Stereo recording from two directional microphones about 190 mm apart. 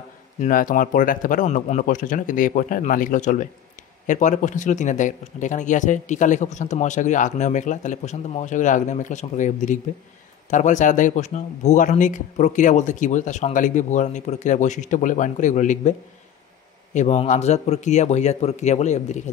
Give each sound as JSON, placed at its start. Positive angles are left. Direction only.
{"t": 0.4, "sound": "a man's voice", "side_deg": 45}
{"t": 16.9, "sound": "speech", "side_deg": 40}